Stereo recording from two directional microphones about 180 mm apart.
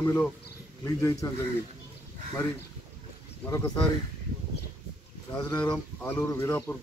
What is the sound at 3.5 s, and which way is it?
Speech, 15° left (ahead or behind).